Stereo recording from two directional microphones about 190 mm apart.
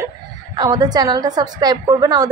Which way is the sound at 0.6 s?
20° right (ahead or behind).